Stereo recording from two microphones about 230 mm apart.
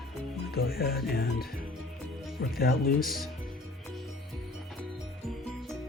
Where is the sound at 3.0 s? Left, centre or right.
Centre.